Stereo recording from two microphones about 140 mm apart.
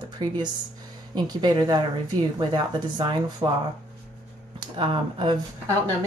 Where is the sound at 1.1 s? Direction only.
30° right (ahead or behind).